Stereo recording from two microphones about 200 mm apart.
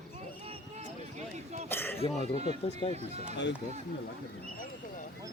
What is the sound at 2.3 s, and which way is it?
Speech, 30° right (ahead or behind).